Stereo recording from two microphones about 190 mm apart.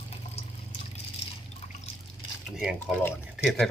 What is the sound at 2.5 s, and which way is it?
Speech, 5° right (ahead or behind).